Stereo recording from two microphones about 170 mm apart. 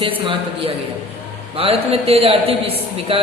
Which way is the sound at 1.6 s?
35° right (ahead or behind).